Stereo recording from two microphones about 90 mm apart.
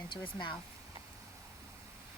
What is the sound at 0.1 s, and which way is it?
Speech, 60° left (ahead or behind).